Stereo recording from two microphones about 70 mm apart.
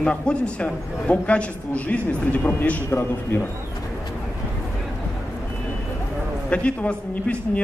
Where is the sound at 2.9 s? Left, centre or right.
Left.